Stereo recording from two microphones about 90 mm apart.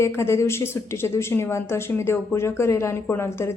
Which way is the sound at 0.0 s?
30° left (ahead or behind).